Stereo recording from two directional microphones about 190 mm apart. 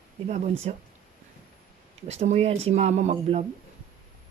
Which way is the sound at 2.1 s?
35° right (ahead or behind).